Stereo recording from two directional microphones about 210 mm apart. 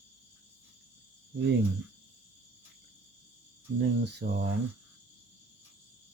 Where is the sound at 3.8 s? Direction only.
50° right (ahead or behind).